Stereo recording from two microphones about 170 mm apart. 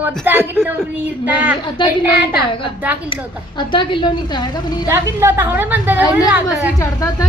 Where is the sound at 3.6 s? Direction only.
30° left (ahead or behind).